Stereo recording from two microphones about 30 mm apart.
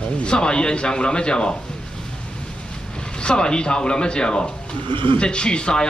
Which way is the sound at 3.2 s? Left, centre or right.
Left.